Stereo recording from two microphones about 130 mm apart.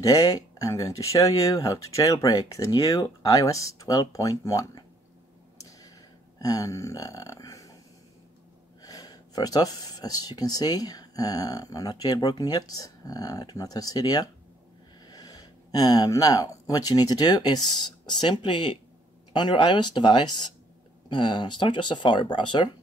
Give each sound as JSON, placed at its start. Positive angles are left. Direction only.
{"t": 0.0, "sound": "speech", "side_deg": 25}
{"t": 5.6, "sound": "a sound", "side_deg": 25}
{"t": 6.4, "sound": "speech", "side_deg": 25}
{"t": 8.8, "sound": "speech", "side_deg": 30}